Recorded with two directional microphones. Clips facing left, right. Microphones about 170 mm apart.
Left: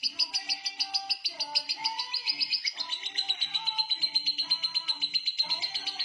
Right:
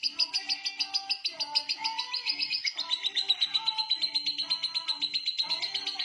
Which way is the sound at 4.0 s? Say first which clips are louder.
Even; 25° right (ahead or behind).